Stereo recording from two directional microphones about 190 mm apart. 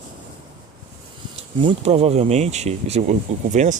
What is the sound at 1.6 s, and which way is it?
Speech, 30° right (ahead or behind).